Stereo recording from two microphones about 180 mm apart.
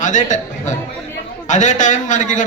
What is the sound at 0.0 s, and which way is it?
A man's voice, 40° left (ahead or behind).